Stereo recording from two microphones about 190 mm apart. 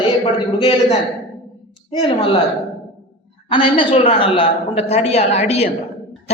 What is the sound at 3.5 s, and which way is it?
A man's voice, 25° left (ahead or behind).